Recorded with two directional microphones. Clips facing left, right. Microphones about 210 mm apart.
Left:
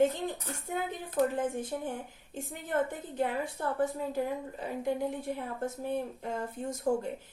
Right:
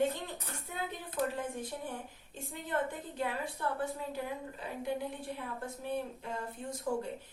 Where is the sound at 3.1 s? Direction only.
45° left (ahead or behind).